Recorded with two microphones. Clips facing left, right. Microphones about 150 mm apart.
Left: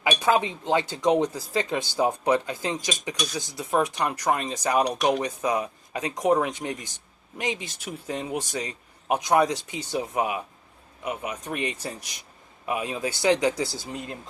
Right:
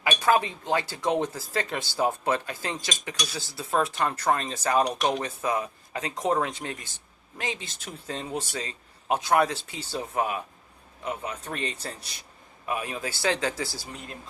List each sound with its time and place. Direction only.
0.0 s speech: 15° left (ahead or behind)